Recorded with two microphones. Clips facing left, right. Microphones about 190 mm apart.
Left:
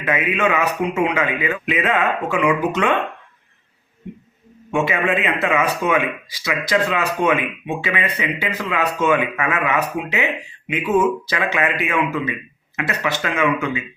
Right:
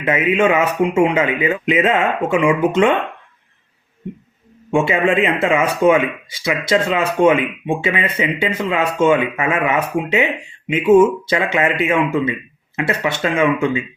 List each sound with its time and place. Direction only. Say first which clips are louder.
0.0 s speech: right 4 dB; 25° right (ahead or behind)
4.7 s speech: right 4 dB; 30° right (ahead or behind)